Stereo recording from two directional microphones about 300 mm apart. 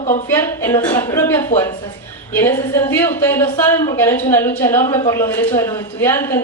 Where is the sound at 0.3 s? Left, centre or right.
Centre.